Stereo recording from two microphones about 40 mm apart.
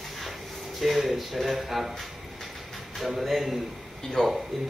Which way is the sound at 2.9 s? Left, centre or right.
Centre.